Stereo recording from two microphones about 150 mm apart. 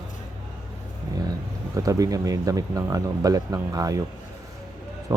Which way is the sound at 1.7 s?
25° right (ahead or behind).